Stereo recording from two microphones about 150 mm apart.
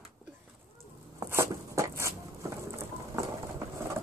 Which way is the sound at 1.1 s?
20° right (ahead or behind).